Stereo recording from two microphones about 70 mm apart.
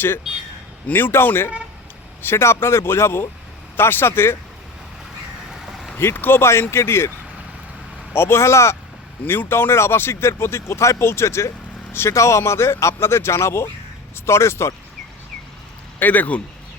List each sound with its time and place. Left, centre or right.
0.9 s speech: left
5.5 s a sound: centre
6.0 s speech: left
8.1 s speech: left
9.2 s speech: left
16.0 s speech: left